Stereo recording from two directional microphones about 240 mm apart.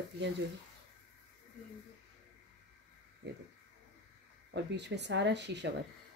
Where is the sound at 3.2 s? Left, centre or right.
Right.